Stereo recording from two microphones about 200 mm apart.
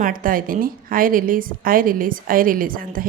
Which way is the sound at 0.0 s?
45° right (ahead or behind).